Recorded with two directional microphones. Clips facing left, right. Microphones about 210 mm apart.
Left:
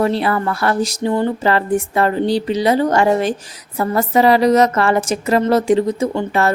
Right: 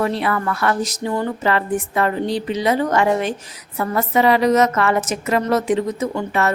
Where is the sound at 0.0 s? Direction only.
35° left (ahead or behind).